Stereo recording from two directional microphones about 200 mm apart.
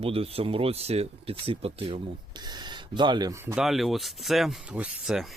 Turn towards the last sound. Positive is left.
turn(degrees=-5)  # may be behind; listen again after turning